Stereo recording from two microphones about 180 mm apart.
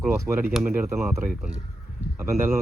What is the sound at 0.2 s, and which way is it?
Speech, 15° right (ahead or behind).